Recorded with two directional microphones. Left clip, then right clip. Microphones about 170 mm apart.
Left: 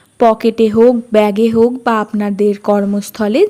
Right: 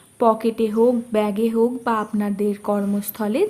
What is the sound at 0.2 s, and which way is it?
A woman's voice, 35° left (ahead or behind).